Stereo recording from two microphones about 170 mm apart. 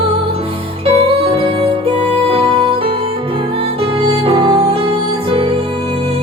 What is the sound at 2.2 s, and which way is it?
Music, 35° right (ahead or behind).